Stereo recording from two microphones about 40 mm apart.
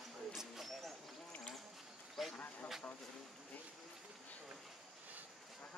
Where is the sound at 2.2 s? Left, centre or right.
Centre.